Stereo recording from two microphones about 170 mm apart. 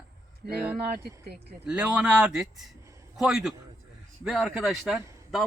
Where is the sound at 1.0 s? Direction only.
65° right (ahead or behind).